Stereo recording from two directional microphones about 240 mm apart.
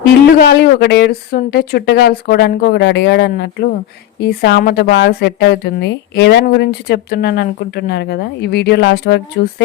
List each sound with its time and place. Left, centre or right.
0.3 s speech: left